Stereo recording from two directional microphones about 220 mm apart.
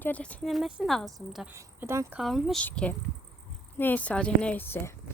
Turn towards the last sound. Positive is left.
turn(degrees=10)  # may be behind; listen again after turning